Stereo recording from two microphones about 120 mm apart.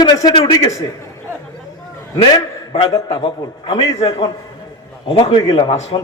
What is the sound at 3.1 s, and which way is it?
A man's voice, 50° left (ahead or behind).